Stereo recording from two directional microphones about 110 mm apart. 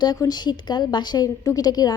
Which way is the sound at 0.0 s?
40° left (ahead or behind).